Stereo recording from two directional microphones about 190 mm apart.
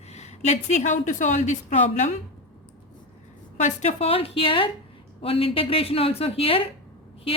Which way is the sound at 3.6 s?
35° left (ahead or behind).